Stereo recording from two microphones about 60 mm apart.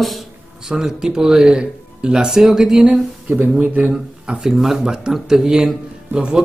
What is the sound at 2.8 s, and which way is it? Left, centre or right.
Speech, right.